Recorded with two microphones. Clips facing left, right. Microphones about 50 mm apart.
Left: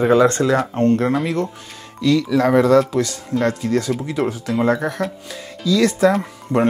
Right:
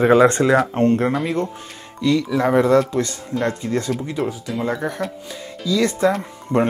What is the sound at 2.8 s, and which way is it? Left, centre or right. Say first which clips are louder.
Speech: left 2 dB; centre.